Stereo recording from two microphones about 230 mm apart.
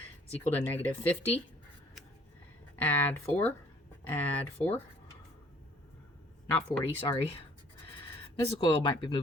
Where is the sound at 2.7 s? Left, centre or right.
Centre.